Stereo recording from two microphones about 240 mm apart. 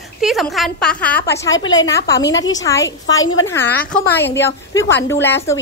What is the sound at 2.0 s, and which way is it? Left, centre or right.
Speech, left.